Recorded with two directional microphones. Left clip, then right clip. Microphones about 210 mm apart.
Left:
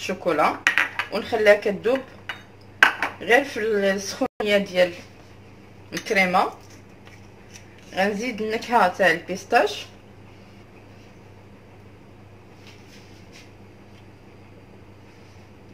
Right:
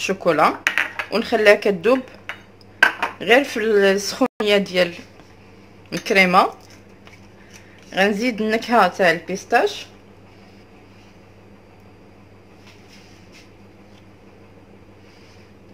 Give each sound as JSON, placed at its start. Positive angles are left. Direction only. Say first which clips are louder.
{"t": 0.0, "sound": "speech", "louder": "right 5 dB", "side_deg": -50}
{"t": 0.7, "sound": "a sound", "louder": "even", "side_deg": 5}
{"t": 1.1, "sound": "speech", "louder": "right 3 dB", "side_deg": -50}
{"t": 3.2, "sound": "speech", "louder": "right 4 dB", "side_deg": -50}
{"t": 5.9, "sound": "speech", "louder": "right 5 dB", "side_deg": -55}
{"t": 7.9, "sound": "speech", "louder": "right 5 dB", "side_deg": -50}
{"t": 9.3, "sound": "speech", "louder": "right 2 dB", "side_deg": -20}